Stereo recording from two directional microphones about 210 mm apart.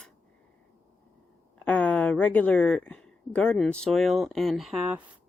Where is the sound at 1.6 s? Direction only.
5° left (ahead or behind).